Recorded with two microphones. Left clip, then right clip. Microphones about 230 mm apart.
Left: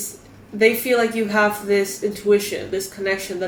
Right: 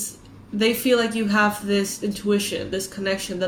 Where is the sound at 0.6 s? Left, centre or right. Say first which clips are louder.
Left 3 dB; right.